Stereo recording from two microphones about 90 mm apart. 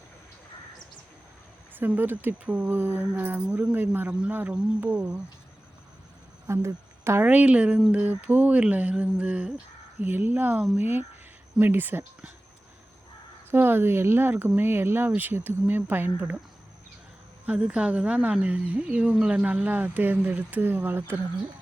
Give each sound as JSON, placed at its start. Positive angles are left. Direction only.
{"t": 1.7, "sound": "speech", "side_deg": -20}
{"t": 6.5, "sound": "speech", "side_deg": -30}
{"t": 7.3, "sound": "speech", "side_deg": -15}
{"t": 13.5, "sound": "speech", "side_deg": -25}
{"t": 17.4, "sound": "speech", "side_deg": -15}